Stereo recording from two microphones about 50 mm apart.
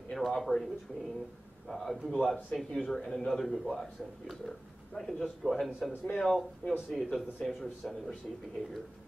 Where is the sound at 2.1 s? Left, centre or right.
Left.